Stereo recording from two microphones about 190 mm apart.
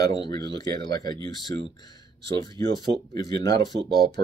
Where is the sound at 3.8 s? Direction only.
60° right (ahead or behind).